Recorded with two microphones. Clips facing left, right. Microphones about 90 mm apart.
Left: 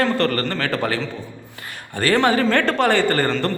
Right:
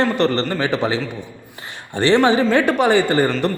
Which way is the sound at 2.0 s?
20° right (ahead or behind).